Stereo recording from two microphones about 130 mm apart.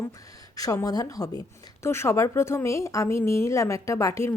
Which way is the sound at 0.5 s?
25° left (ahead or behind).